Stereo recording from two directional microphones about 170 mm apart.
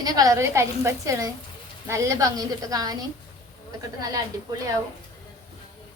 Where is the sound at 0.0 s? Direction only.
20° right (ahead or behind).